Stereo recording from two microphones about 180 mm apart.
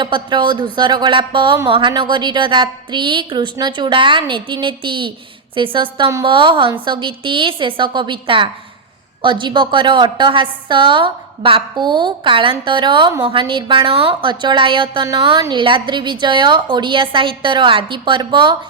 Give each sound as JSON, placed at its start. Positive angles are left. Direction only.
{"t": 0.0, "sound": "a woman's voice", "side_deg": -25}